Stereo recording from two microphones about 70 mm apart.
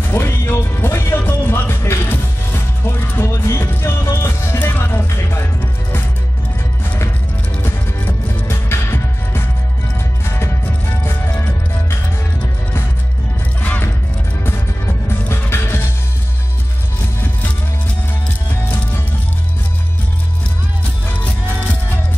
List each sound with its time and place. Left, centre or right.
0.1 s speech: left
1.2 s music: left
7.6 s music: left
13.6 s music: left
15.0 s music: left
21.2 s music: left